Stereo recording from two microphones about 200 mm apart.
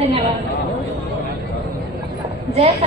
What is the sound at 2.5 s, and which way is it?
Speech, 30° right (ahead or behind).